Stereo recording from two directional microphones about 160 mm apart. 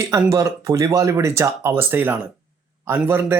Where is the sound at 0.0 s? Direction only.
20° right (ahead or behind).